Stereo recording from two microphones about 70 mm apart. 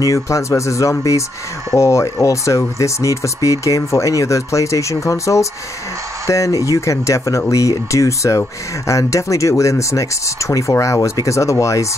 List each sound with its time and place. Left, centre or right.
0.0 s speech: left